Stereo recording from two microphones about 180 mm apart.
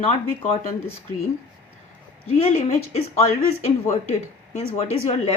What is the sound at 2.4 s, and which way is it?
Speech, 35° left (ahead or behind).